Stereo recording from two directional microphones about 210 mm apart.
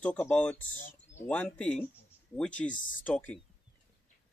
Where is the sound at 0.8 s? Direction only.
40° left (ahead or behind).